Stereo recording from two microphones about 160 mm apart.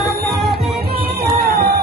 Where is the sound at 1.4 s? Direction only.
75° right (ahead or behind).